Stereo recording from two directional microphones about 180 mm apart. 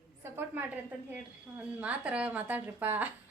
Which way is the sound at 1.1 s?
10° right (ahead or behind).